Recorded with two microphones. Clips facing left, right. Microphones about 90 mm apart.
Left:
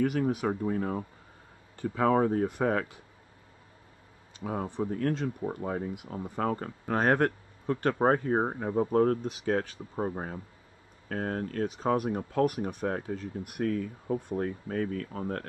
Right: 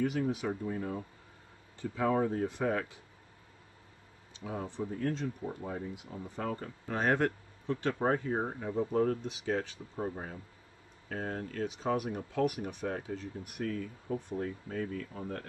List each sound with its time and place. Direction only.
0.0 s speech: 55° left (ahead or behind)
4.4 s speech: 50° left (ahead or behind)